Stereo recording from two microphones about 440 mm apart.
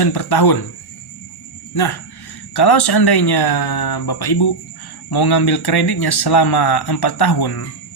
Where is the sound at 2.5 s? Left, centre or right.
Left.